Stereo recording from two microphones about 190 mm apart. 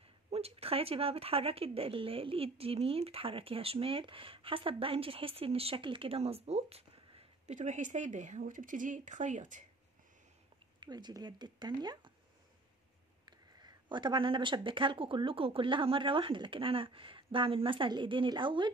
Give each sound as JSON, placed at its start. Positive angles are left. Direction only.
{"t": 0.3, "sound": "speech", "side_deg": -30}
{"t": 10.8, "sound": "speech", "side_deg": -20}
{"t": 13.2, "sound": "speech", "side_deg": -20}